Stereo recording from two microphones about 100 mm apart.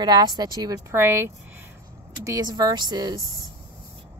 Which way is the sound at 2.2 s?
35° right (ahead or behind).